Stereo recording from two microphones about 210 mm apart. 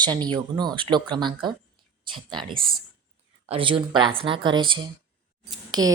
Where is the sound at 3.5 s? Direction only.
25° right (ahead or behind).